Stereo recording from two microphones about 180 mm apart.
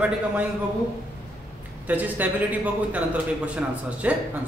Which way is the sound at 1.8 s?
10° right (ahead or behind).